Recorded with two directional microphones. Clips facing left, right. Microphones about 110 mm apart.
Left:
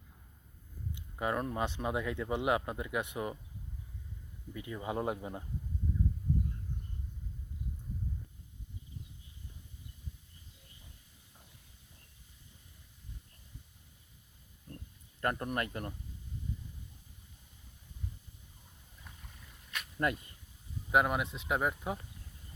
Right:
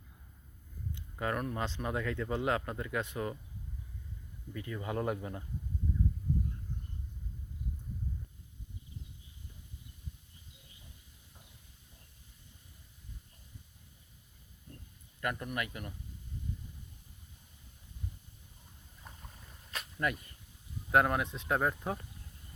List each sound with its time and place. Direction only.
0.9 s speech: 15° left (ahead or behind)
4.5 s speech: 20° left (ahead or behind)
15.2 s speech: 40° left (ahead or behind)
20.0 s speech: 25° left (ahead or behind)
20.9 s speech: 5° left (ahead or behind)